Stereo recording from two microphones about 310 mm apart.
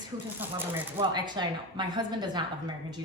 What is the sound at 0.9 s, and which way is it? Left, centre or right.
A woman's voice, centre.